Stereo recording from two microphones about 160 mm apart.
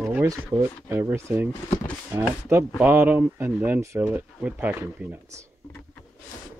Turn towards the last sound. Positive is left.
turn(degrees=-15)  # may be behind; listen again after turning